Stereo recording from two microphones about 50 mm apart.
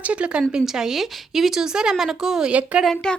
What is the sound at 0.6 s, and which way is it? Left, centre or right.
Speech, centre.